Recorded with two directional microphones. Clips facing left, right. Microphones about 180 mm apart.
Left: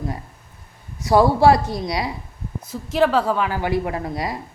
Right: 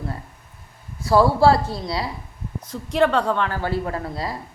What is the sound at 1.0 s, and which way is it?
A woman's voice, 20° left (ahead or behind).